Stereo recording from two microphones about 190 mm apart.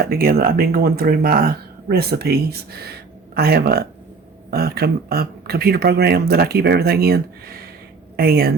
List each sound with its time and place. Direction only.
0.0 s speech: 50° right (ahead or behind)